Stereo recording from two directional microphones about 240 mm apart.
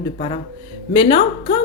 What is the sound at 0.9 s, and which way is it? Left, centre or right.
Speech, left.